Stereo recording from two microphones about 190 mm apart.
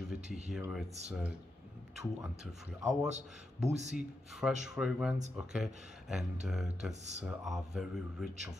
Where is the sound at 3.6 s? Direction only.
35° right (ahead or behind).